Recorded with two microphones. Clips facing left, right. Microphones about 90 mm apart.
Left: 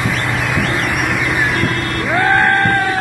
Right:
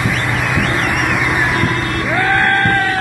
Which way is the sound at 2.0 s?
25° left (ahead or behind).